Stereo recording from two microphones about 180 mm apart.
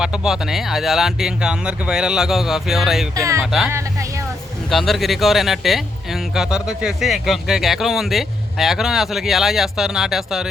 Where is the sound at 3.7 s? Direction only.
15° right (ahead or behind).